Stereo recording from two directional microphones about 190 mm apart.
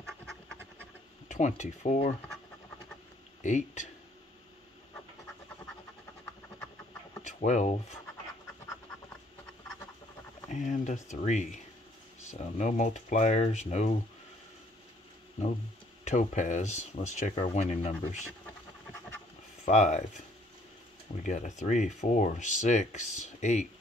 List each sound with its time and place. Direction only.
1.3 s speech: 40° left (ahead or behind)
3.4 s speech: 40° left (ahead or behind)
7.2 s speech: 40° left (ahead or behind)
10.5 s speech: 40° left (ahead or behind)
16.0 s speech: 40° left (ahead or behind)
19.6 s speech: 35° left (ahead or behind)
21.2 s speech: 40° left (ahead or behind)